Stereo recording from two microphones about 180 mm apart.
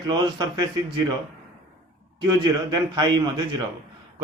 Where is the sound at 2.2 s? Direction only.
25° right (ahead or behind).